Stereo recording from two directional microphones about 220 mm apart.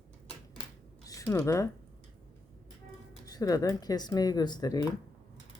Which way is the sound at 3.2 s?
15° left (ahead or behind).